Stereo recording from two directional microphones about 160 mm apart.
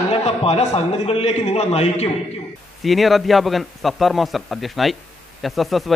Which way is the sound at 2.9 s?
Centre (ahead or behind).